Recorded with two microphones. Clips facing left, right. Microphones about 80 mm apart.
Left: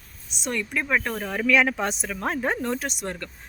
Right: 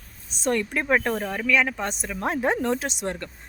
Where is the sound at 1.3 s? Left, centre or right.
Centre.